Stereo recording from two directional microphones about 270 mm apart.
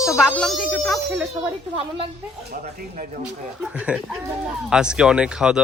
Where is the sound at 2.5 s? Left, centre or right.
Right.